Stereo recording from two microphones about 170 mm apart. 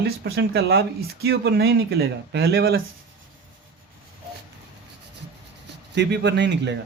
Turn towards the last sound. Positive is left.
turn(degrees=-90)